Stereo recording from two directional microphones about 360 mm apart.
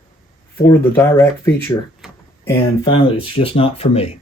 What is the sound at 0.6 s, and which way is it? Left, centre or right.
Speech, centre.